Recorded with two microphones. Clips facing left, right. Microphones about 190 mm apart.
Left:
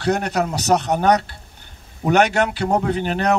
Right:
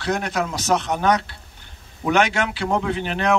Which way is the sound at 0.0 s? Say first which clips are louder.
Left 3 dB; 40° left (ahead or behind).